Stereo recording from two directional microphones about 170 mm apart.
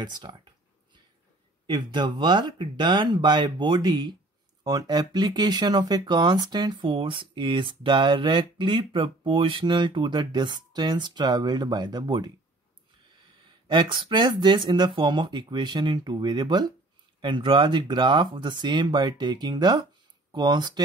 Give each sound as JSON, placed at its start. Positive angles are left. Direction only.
{"t": 0.0, "sound": "speech", "side_deg": -25}
{"t": 1.7, "sound": "speech", "side_deg": -25}
{"t": 13.7, "sound": "speech", "side_deg": -30}